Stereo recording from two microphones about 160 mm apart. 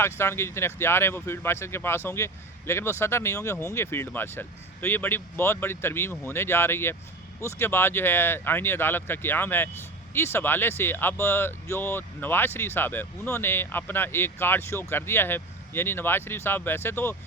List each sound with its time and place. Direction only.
0.0 s speech: 15° left (ahead or behind)